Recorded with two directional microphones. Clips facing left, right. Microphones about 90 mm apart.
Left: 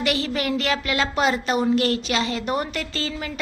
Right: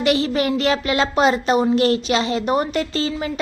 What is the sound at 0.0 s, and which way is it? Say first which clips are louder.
Speech: right 6 dB; 25° right (ahead or behind).